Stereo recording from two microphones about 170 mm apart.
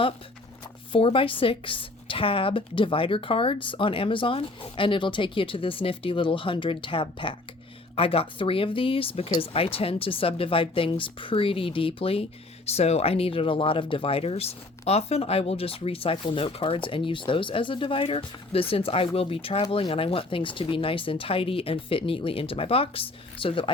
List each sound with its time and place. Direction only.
0.9 s speech: 30° left (ahead or behind)